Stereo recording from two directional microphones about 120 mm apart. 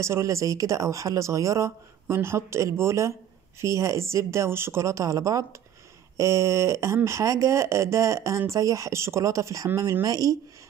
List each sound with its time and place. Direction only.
0.0 s speech: 25° right (ahead or behind)